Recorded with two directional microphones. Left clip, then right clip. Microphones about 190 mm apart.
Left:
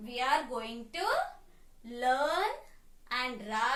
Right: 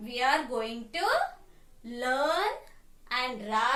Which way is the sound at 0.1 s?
5° right (ahead or behind).